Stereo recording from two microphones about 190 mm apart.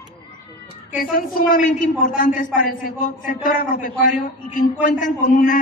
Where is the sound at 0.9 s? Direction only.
45° left (ahead or behind).